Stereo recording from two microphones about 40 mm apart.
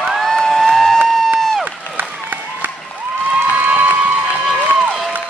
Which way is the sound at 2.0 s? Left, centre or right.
Right.